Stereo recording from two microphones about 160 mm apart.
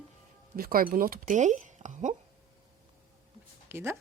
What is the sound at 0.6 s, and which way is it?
Speech, 65° right (ahead or behind).